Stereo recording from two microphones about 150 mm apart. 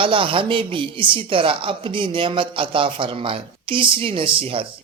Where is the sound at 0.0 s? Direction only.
35° right (ahead or behind).